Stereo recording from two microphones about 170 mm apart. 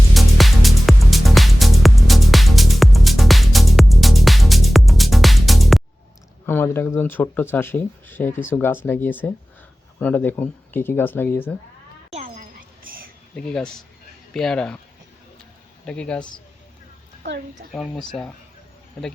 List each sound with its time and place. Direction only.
0.1 s music: centre (ahead or behind)
6.4 s speech: 15° left (ahead or behind)
12.4 s a sound: 55° right (ahead or behind)
13.3 s speech: 5° left (ahead or behind)
15.9 s speech: 5° left (ahead or behind)
17.2 s a woman's voice: 90° right
17.7 s speech: 5° left (ahead or behind)